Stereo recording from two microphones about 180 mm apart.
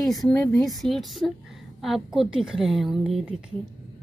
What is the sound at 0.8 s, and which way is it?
Speech, centre (ahead or behind).